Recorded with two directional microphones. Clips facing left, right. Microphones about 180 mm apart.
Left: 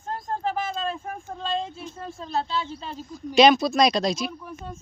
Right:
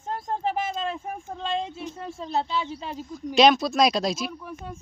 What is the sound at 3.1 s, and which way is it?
A man's voice, centre (ahead or behind).